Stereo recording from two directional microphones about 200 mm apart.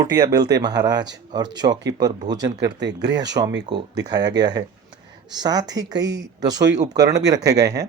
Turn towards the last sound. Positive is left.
turn(degrees=-15)  # may be behind; listen again after turning